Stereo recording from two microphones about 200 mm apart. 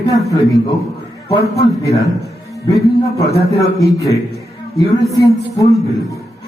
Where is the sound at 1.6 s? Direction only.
15° left (ahead or behind).